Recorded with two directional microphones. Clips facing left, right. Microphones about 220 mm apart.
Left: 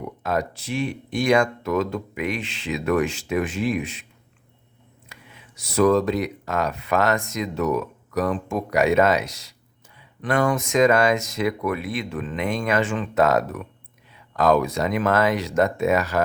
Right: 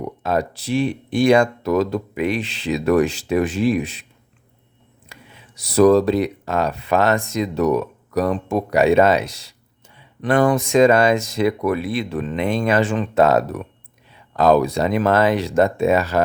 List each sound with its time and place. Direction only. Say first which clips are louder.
0.0 s speech: right 4 dB; 30° right (ahead or behind)
5.0 s speech: right 3 dB; 30° right (ahead or behind)